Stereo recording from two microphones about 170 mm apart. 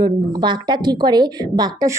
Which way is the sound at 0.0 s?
25° right (ahead or behind).